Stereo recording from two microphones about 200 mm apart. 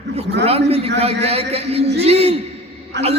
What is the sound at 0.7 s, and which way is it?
A man's voice, 30° right (ahead or behind).